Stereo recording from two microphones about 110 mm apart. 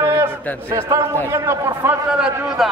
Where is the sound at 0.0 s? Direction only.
25° right (ahead or behind).